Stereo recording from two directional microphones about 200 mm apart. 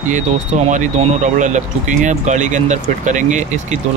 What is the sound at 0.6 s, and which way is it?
Speech, 35° right (ahead or behind).